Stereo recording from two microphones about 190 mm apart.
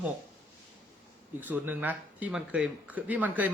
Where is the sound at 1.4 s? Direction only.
10° right (ahead or behind).